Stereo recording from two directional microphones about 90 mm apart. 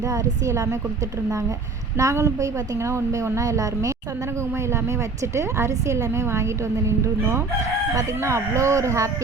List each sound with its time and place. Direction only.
0.1 s a woman's voice: 40° right (ahead or behind)
2.0 s a woman's voice: 35° right (ahead or behind)